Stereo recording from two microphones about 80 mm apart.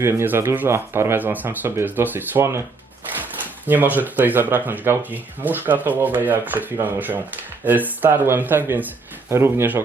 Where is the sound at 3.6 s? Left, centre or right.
Right.